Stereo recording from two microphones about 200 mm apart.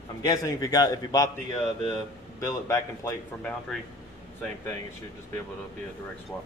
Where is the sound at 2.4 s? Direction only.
15° left (ahead or behind).